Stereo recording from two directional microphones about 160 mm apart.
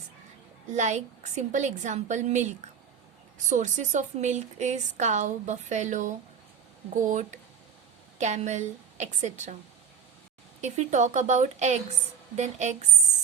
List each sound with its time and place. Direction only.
0.7 s a woman's voice: 45° right (ahead or behind)
7.1 s a woman's voice: 50° right (ahead or behind)
10.6 s a woman's voice: 50° right (ahead or behind)